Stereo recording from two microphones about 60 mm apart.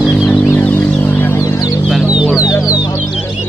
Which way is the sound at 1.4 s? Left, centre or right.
Left.